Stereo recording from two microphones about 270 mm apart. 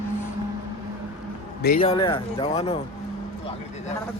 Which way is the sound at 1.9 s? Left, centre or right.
Centre.